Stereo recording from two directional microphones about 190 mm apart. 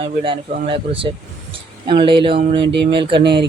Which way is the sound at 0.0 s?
25° right (ahead or behind).